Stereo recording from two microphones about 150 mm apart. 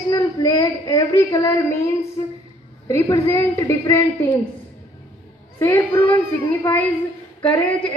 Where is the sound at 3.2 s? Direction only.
15° left (ahead or behind).